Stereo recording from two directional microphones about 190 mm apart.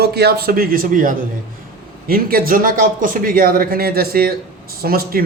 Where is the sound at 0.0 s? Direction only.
55° right (ahead or behind).